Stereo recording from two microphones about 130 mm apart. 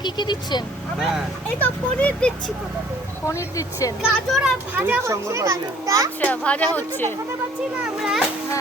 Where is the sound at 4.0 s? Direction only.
5° right (ahead or behind).